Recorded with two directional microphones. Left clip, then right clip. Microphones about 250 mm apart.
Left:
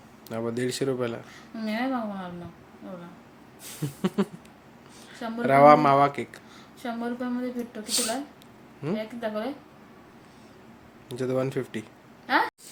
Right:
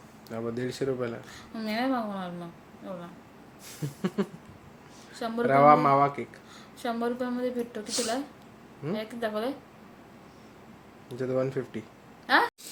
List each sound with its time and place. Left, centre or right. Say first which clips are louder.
0.3 s speech: left 4 dB; centre
1.3 s a woman's voice: left 1 dB; centre
3.7 s speech: left 3 dB; centre
5.4 s speech: left 3 dB; centre
6.8 s a woman's voice: right 2 dB; centre
7.9 s speech: left 4 dB; centre
9.0 s a woman's voice: right 2 dB; centre
11.1 s speech: left 1 dB; centre
12.3 s a woman's voice: right 1 dB; centre